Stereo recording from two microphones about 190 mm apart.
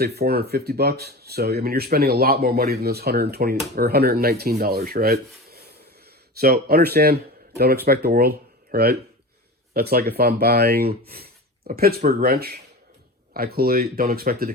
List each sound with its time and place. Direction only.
0.0 s speech: 55° right (ahead or behind)
3.8 s rub: 55° right (ahead or behind)
6.4 s speech: 55° right (ahead or behind)